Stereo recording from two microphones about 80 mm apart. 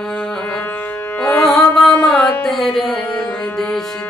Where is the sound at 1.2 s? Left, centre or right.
Left.